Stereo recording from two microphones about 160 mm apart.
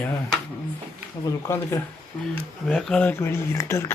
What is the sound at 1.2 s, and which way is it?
Speech, 20° left (ahead or behind).